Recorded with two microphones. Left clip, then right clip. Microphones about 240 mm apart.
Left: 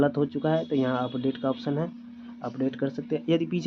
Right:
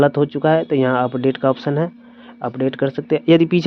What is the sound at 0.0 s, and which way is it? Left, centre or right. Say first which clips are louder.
Speech: right 10 dB; right.